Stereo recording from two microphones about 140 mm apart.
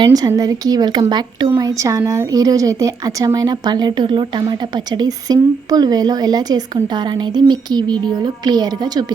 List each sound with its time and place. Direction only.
0.0 s speech: 25° right (ahead or behind)